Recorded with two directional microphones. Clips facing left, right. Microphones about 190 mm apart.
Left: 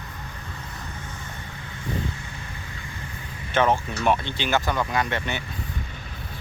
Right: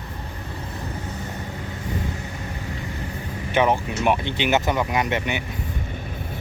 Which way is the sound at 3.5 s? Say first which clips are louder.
Right 1 dB; 15° right (ahead or behind).